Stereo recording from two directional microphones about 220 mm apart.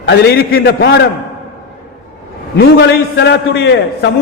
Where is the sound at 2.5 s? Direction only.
50° left (ahead or behind).